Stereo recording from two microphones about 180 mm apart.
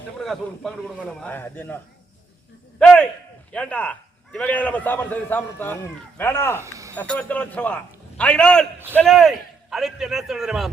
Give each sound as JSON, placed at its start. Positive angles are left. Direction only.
{"t": 0.2, "sound": "a man's voice", "side_deg": 0}
{"t": 1.3, "sound": "a man's voice", "side_deg": 10}
{"t": 6.6, "sound": "a sound", "side_deg": -15}
{"t": 6.9, "sound": "a man's voice", "side_deg": 10}